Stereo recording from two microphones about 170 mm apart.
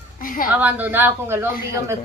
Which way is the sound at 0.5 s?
10° right (ahead or behind).